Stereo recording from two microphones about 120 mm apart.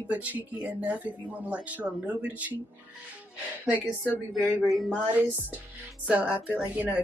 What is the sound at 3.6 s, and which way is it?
A woman's voice, 10° right (ahead or behind).